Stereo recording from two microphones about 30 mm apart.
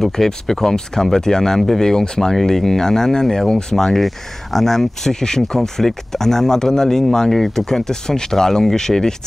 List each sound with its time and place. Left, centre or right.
0.0 s speech: centre